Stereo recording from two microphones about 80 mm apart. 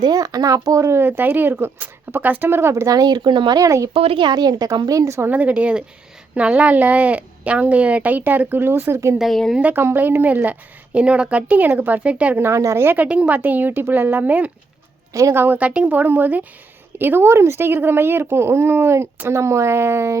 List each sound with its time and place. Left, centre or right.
0.0 s speech: right
2.9 s speech: right
3.6 s speech: right
4.2 s a woman's voice: right
5.3 s speech: centre; by 9.1 s right
9.1 s speech: centre
9.6 s a woman's voice: centre
12.4 s speech: right
13.1 s a woman's voice: centre
15.1 s a woman's voice: right